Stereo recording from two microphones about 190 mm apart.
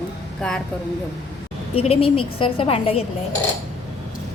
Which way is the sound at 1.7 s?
30° left (ahead or behind).